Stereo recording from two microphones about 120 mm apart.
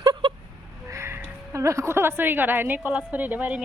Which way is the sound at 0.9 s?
25° right (ahead or behind).